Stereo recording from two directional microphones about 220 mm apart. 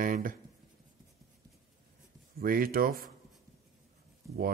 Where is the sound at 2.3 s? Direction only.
40° right (ahead or behind).